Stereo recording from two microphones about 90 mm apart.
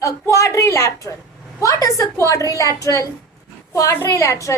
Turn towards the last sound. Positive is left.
turn(degrees=35)  # may be behind; listen again after turning